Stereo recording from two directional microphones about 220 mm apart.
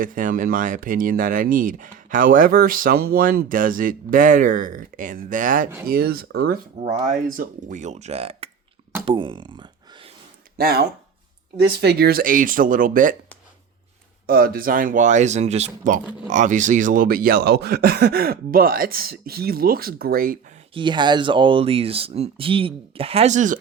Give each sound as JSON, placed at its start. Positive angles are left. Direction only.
{"t": 0.0, "sound": "speech", "side_deg": -40}
{"t": 6.9, "sound": "speech", "side_deg": -35}
{"t": 10.6, "sound": "speech", "side_deg": -45}
{"t": 14.3, "sound": "speech", "side_deg": -40}
{"t": 20.7, "sound": "speech", "side_deg": -20}